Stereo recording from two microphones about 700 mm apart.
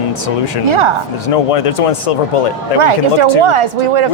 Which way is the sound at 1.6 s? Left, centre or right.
Left.